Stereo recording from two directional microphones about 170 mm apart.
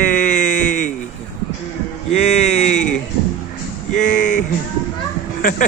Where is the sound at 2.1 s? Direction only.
40° left (ahead or behind).